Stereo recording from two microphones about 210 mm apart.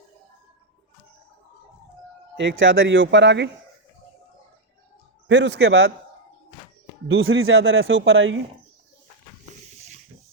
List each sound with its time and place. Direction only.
2.3 s speech: 60° right (ahead or behind)
5.3 s speech: 60° right (ahead or behind)
7.1 s a man's voice: 70° right (ahead or behind)